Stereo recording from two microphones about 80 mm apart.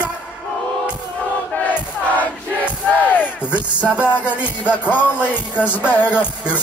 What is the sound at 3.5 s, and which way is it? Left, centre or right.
Music, centre.